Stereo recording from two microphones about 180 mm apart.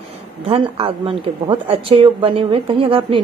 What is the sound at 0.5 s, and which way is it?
A woman's voice, 30° right (ahead or behind).